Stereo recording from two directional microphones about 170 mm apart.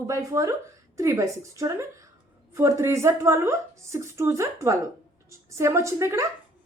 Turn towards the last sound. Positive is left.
turn(degrees=-15)  # may be behind; listen again after turning